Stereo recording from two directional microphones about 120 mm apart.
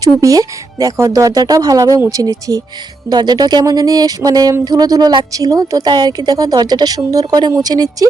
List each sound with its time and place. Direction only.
0.0 s a woman's voice: 30° right (ahead or behind)